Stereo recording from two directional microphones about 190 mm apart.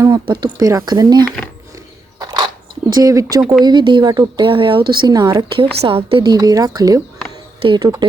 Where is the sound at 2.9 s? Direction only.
20° right (ahead or behind).